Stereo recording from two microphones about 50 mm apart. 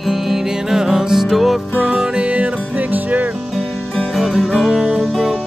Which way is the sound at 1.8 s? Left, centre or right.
Centre.